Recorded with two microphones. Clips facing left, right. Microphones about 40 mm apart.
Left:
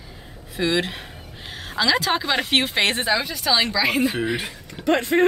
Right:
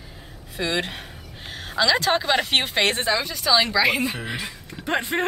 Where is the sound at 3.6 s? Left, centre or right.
Centre.